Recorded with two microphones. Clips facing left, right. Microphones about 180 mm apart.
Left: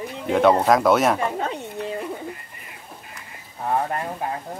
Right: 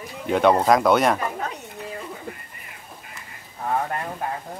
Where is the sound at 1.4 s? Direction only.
25° left (ahead or behind).